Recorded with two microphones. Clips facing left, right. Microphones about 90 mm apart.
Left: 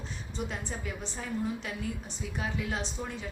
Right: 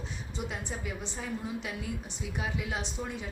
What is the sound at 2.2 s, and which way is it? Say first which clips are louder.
Speech: left 1 dB; 10° right (ahead or behind).